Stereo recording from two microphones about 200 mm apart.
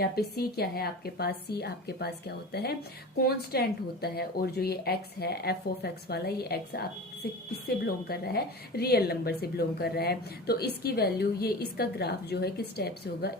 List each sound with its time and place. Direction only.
0.0 s a woman's voice: 50° left (ahead or behind)
8.0 s a woman's voice: 50° left (ahead or behind)